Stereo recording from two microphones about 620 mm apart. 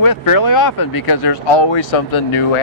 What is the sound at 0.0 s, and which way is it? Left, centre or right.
Speech, left.